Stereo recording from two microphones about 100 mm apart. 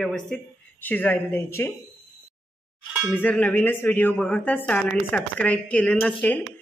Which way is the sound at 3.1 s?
15° left (ahead or behind).